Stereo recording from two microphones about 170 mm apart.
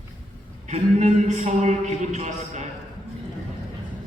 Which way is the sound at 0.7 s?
45° right (ahead or behind).